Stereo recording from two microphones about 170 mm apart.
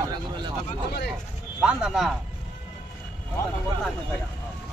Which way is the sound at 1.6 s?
5° right (ahead or behind).